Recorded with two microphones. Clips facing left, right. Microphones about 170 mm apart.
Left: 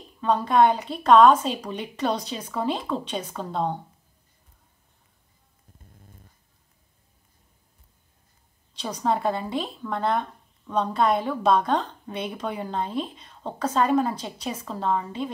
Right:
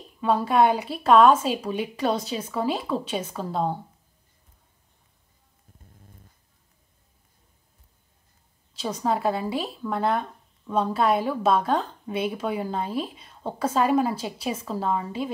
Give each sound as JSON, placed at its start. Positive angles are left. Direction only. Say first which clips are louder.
{"t": 0.2, "sound": "a woman's voice", "louder": "left 1 dB", "side_deg": -10}
{"t": 8.7, "sound": "a woman's voice", "louder": "even", "side_deg": -5}